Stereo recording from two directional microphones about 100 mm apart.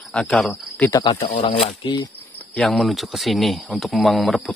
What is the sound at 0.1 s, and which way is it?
Speech, 10° left (ahead or behind).